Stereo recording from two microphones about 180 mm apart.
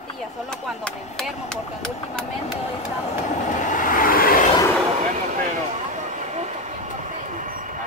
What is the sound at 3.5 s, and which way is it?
Vehicle, 45° left (ahead or behind).